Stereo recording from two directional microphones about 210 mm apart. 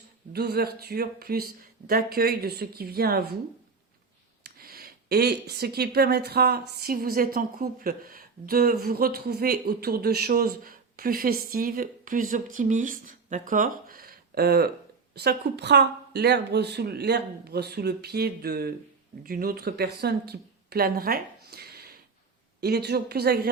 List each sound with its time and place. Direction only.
0.3 s speech: 50° right (ahead or behind)
4.4 s speech: 45° right (ahead or behind)